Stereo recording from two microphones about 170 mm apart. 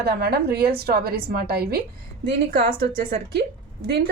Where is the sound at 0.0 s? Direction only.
65° right (ahead or behind).